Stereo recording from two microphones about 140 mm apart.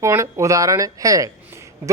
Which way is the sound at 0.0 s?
20° right (ahead or behind).